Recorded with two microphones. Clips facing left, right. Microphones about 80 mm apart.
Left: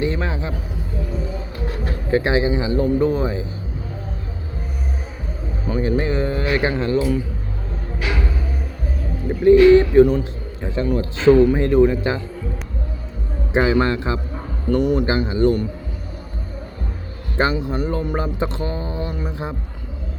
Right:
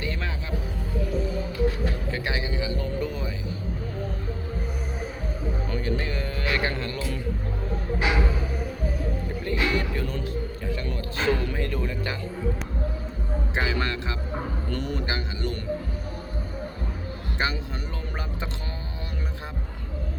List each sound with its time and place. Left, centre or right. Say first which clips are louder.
0.0 s speech: left 9 dB; left
1.8 s speech: left 9 dB; left
5.6 s speech: left 11 dB; centre
9.4 s a man's voice: left 18 dB; left
13.5 s speech: left 11 dB; left
14.7 s a man's voice: left 15 dB; centre
15.0 s speech: left 13 dB; left
17.3 s speech: left 10 dB; left